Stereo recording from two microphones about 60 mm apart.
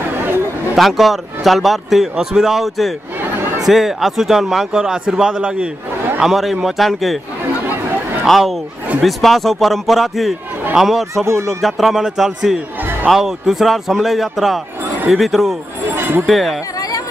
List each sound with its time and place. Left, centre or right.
0.7 s a man's voice: centre
6.2 s a man's voice: centre
7.4 s chatter: right
8.3 s a man's voice: centre
11.2 s a man's voice: right
11.6 s a man's voice: centre
15.9 s a sound: right
16.3 s a man's voice: centre